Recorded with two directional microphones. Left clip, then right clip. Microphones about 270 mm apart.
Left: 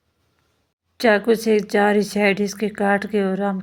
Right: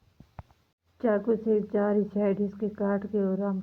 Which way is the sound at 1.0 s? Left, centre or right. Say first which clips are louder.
Left 10 dB; left.